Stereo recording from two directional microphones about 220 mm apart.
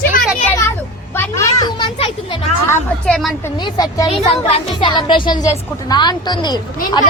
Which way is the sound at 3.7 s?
15° left (ahead or behind).